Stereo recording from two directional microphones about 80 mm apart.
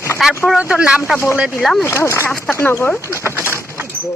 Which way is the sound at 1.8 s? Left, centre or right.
Left.